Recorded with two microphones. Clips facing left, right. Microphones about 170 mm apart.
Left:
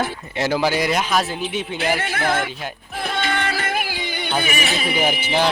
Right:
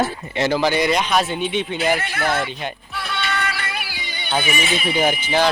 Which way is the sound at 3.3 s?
30° left (ahead or behind).